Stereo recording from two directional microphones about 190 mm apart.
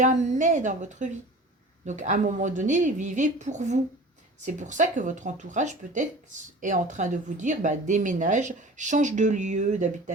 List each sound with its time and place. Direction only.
0.0 s speech: 40° right (ahead or behind)